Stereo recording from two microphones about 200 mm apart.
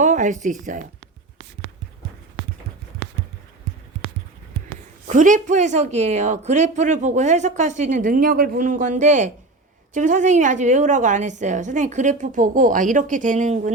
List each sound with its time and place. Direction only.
0.0 s speech: 40° right (ahead or behind)
5.0 s a woman's voice: 40° right (ahead or behind)